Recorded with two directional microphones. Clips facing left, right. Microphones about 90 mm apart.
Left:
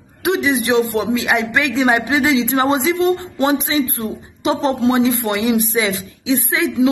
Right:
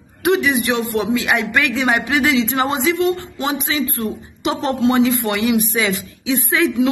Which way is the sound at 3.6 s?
20° left (ahead or behind).